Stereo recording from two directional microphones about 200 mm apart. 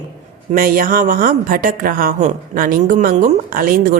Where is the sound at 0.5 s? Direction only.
45° right (ahead or behind).